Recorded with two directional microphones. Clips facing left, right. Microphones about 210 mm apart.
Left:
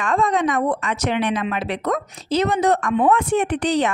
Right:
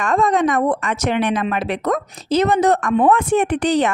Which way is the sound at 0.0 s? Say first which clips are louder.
Right 3 dB; 45° right (ahead or behind).